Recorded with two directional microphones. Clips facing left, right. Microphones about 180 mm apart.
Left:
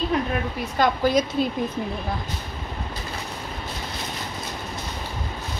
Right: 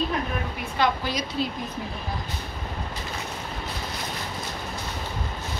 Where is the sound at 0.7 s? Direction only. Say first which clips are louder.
Left 6 dB; 45° left (ahead or behind).